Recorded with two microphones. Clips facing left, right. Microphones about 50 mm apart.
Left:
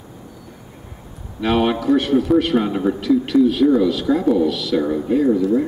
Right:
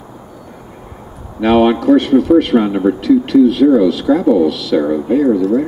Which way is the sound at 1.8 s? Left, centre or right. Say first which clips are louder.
Right 6 dB; centre.